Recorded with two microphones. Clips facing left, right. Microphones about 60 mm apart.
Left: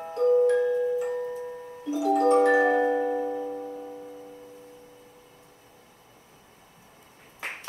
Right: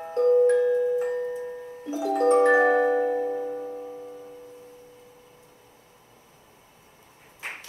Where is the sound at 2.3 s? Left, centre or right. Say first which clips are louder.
Right 4 dB; centre.